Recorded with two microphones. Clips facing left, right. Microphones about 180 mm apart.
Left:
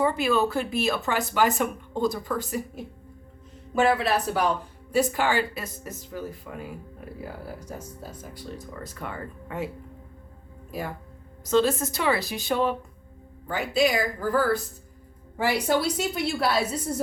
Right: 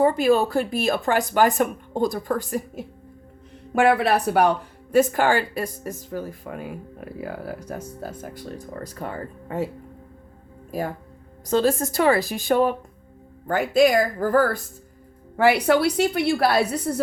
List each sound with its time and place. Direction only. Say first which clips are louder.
0.0 s speech: right 5 dB; 45° right (ahead or behind)
3.8 s speech: right 4 dB; 60° right (ahead or behind)
8.7 s speech: right 6 dB; 40° right (ahead or behind)
10.7 s speech: right 5 dB; 45° right (ahead or behind)
15.4 s a woman's voice: right 6 dB; 70° right (ahead or behind)